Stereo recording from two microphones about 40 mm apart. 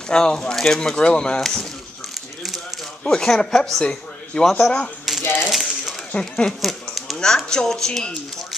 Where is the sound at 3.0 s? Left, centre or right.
Left.